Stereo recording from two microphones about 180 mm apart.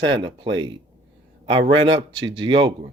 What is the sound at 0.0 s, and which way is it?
Speech, 25° right (ahead or behind).